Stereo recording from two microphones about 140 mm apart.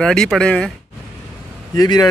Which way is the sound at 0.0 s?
5° left (ahead or behind).